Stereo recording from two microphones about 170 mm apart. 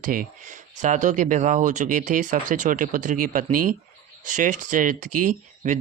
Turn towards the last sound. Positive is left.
turn(degrees=-50)  # may be behind; listen again after turning